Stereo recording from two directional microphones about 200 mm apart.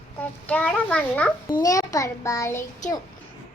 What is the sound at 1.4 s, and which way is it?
A child's voice, 20° left (ahead or behind).